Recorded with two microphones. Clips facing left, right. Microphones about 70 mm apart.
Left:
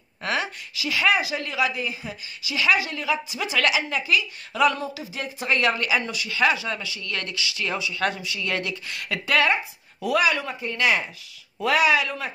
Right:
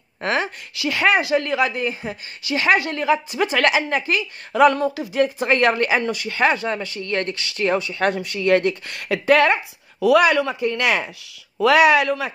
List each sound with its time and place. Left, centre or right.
0.2 s a sound: right
0.7 s a woman's voice: right
7.3 s a woman's voice: right
10.2 s speech: right